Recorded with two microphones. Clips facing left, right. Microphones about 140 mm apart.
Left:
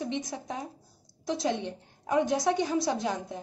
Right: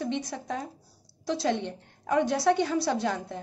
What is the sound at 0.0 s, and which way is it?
A woman's voice, 15° left (ahead or behind).